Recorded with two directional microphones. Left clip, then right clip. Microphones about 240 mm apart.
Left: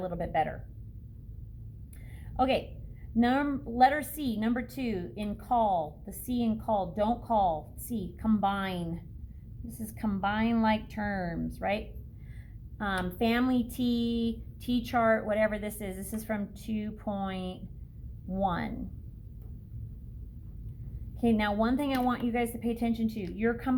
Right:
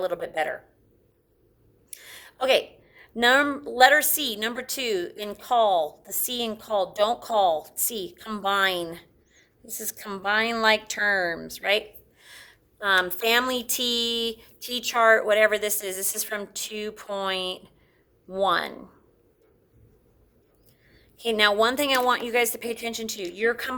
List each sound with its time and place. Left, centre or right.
0.0 s a woman's voice: right
1.9 s a sound: right
3.2 s a woman's voice: right
21.2 s a woman's voice: right